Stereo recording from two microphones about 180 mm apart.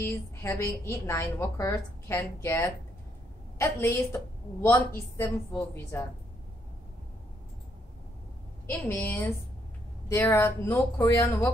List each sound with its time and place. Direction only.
0.0 s a woman's voice: 15° left (ahead or behind)
8.8 s a woman's voice: 10° left (ahead or behind)